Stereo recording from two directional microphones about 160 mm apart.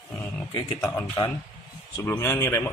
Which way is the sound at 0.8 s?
15° left (ahead or behind).